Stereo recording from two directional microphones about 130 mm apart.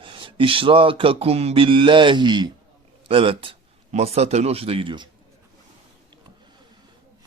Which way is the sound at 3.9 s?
55° right (ahead or behind).